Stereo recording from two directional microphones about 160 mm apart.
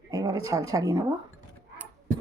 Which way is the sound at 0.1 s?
20° right (ahead or behind).